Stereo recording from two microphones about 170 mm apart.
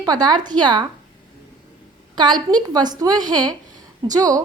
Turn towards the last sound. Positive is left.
turn(degrees=-20)  # may be behind; listen again after turning